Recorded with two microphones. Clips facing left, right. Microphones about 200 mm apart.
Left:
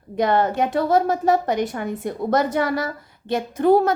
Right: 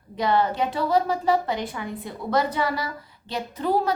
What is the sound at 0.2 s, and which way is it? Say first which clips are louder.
A woman's voice: left 3 dB; 50° left (ahead or behind).